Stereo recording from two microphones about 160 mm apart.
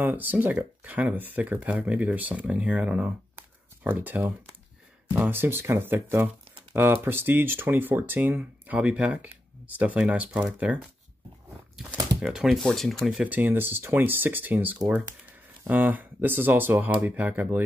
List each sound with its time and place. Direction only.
0.0 s speech: 10° right (ahead or behind)